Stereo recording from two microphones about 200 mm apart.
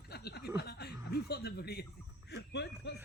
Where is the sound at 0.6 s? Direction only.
55° left (ahead or behind).